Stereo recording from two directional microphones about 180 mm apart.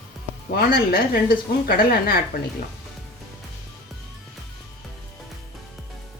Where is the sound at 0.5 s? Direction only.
55° left (ahead or behind).